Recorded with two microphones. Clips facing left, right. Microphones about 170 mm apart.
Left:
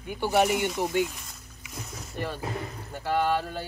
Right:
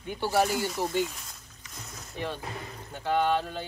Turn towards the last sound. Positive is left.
turn(degrees=5)  # may be behind; listen again after turning